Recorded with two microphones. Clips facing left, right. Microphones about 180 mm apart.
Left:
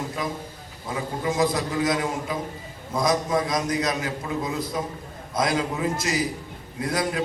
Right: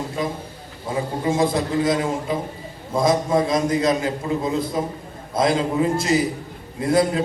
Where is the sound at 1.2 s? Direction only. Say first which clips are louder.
Right 3 dB; 25° right (ahead or behind).